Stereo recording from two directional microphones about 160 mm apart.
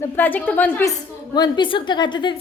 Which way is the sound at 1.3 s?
25° left (ahead or behind).